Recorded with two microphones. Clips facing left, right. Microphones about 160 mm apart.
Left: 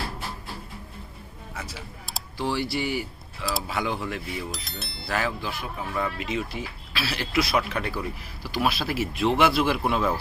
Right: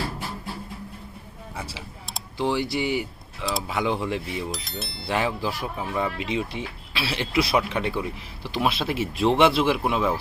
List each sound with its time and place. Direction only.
2.4 s speech: 20° right (ahead or behind)
4.5 s speech: centre (ahead or behind)
5.0 s speech: 25° right (ahead or behind)